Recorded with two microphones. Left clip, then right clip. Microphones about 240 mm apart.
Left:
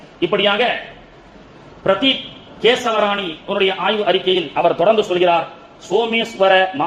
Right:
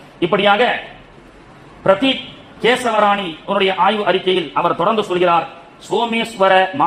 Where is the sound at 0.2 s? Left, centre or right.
Right.